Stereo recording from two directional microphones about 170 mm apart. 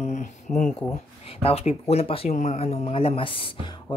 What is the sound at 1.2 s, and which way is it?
Speech, 35° left (ahead or behind).